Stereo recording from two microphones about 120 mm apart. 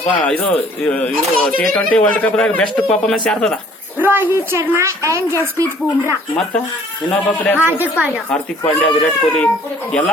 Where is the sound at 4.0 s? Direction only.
15° right (ahead or behind).